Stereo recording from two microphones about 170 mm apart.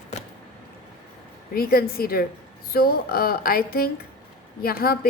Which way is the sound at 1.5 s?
60° left (ahead or behind).